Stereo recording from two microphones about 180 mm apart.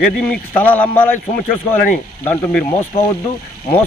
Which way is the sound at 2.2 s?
15° left (ahead or behind).